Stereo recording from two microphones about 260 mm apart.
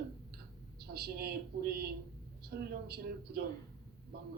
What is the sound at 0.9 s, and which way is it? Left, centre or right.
A man's voice, right.